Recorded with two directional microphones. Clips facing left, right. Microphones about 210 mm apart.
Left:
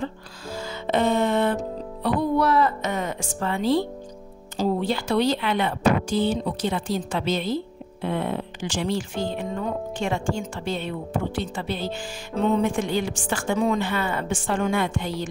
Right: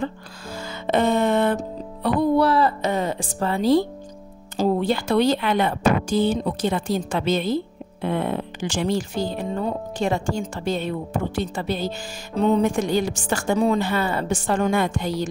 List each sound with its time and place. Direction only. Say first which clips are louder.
0.5 s music: right 2 dB; 55° right (ahead or behind)
2.3 s music: right 2 dB; 30° right (ahead or behind)
4.6 s speech: right 3 dB; 50° right (ahead or behind)